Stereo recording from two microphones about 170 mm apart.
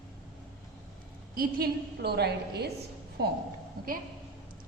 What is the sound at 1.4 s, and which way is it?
A woman's voice, 65° right (ahead or behind).